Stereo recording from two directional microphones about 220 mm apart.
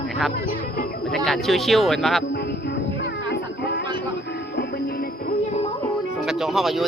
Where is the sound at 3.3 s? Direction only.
45° left (ahead or behind).